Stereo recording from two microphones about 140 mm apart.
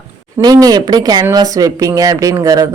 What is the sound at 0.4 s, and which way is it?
Speech, 25° right (ahead or behind).